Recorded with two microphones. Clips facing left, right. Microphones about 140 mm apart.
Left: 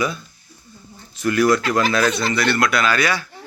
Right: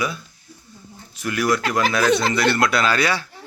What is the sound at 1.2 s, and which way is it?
Speech, 10° right (ahead or behind).